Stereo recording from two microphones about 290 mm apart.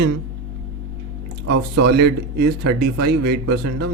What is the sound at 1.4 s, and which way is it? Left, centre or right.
Speech, right.